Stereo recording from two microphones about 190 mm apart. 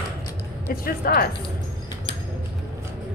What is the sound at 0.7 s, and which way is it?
Speech, 50° left (ahead or behind).